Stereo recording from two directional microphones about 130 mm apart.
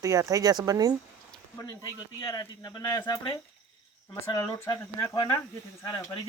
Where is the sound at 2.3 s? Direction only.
35° left (ahead or behind).